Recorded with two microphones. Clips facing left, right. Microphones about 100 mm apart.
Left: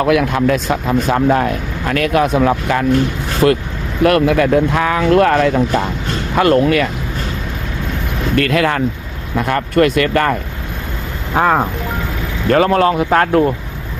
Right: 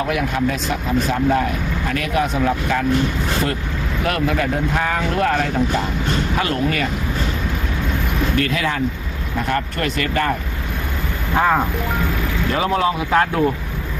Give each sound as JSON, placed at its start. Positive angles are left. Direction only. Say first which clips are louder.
{"t": 0.0, "sound": "speech", "louder": "left 6 dB", "side_deg": 90}
{"t": 0.5, "sound": "speech", "louder": "left 5 dB", "side_deg": 55}
{"t": 4.0, "sound": "speech", "louder": "left 9 dB", "side_deg": 75}
{"t": 6.3, "sound": "speech", "louder": "left 12 dB", "side_deg": 60}
{"t": 8.4, "sound": "speech", "louder": "left 8 dB", "side_deg": 60}
{"t": 12.5, "sound": "speech", "louder": "left 8 dB", "side_deg": 55}